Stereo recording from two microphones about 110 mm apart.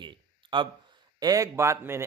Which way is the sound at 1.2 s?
30° right (ahead or behind).